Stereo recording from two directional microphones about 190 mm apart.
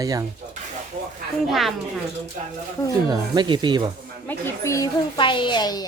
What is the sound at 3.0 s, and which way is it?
Speech, 20° right (ahead or behind).